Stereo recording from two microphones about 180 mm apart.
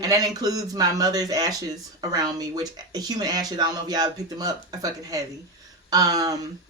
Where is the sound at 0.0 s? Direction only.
20° right (ahead or behind).